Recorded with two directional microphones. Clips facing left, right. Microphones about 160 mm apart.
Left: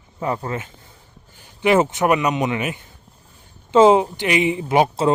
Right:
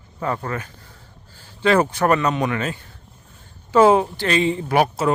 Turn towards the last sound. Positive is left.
turn(degrees=20)  # may be behind; listen again after turning